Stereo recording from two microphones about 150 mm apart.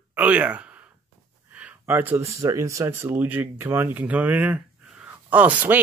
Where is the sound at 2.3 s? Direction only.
20° right (ahead or behind).